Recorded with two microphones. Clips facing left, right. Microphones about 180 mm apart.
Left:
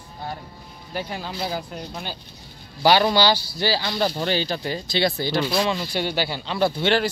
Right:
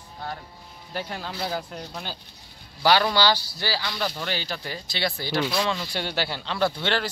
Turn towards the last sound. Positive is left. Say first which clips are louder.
# left 4 dB
turn(degrees=10)  # may be behind; listen again after turning